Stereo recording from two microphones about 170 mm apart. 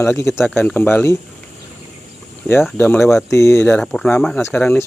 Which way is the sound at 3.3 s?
15° left (ahead or behind).